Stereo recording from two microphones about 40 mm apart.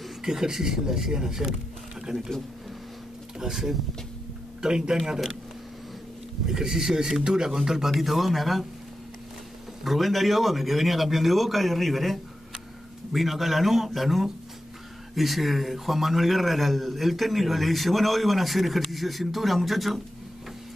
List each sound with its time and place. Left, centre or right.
0.2 s speech: centre
3.3 s speech: centre
6.4 s a man's voice: centre
9.8 s a man's voice: centre